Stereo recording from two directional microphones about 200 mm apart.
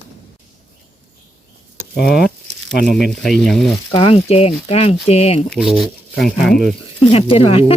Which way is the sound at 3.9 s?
30° left (ahead or behind).